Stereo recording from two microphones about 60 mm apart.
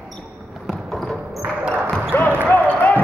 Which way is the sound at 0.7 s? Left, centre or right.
Centre.